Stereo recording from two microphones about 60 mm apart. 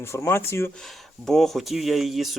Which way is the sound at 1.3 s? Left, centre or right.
Centre.